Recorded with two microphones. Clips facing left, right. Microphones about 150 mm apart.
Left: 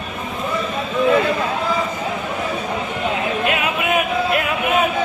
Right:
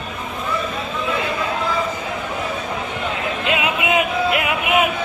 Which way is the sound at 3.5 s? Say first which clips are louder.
Right 3 dB; 20° right (ahead or behind).